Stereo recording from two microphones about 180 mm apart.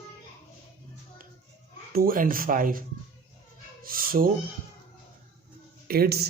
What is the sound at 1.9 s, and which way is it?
Speech, 55° right (ahead or behind).